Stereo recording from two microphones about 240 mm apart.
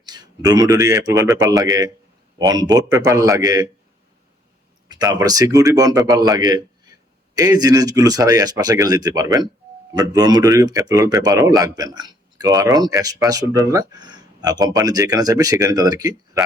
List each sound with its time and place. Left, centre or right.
0.0 s speech: centre
4.9 s speech: centre